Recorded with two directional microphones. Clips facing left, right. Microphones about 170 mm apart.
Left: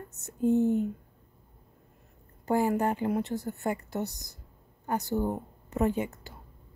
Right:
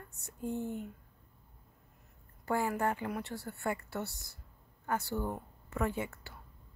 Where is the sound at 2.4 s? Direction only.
20° left (ahead or behind).